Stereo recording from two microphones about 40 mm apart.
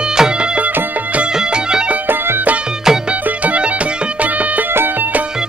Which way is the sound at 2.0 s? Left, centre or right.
Right.